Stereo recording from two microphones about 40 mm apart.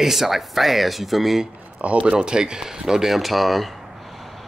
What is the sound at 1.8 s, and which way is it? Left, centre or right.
Speech, right.